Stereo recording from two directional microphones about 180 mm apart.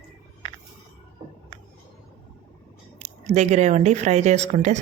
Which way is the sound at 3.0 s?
40° right (ahead or behind).